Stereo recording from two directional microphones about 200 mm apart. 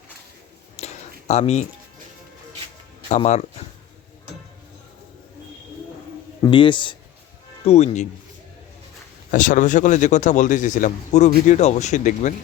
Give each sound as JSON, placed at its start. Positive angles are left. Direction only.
{"t": 0.8, "sound": "a sound", "side_deg": 30}
{"t": 1.3, "sound": "speech", "side_deg": 35}
{"t": 3.1, "sound": "speech", "side_deg": 35}
{"t": 6.4, "sound": "speech", "side_deg": 25}
{"t": 9.3, "sound": "speech", "side_deg": 40}